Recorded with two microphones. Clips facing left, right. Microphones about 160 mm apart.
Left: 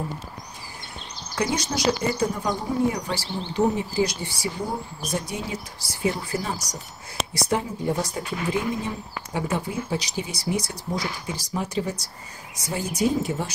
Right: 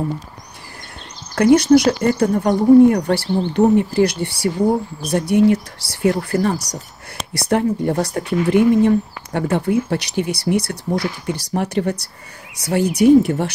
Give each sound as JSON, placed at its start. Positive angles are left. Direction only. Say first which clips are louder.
{"t": 1.3, "sound": "speech", "louder": "right 15 dB", "side_deg": -60}